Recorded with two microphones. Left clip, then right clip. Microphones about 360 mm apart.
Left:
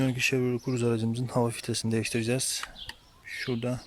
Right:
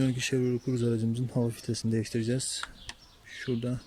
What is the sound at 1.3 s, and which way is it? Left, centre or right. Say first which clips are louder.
Speech: left 6 dB; left.